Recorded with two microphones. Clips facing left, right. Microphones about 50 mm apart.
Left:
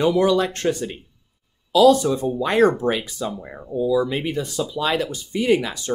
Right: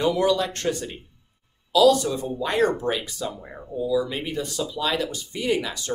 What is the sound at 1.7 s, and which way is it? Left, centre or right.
Speech, left.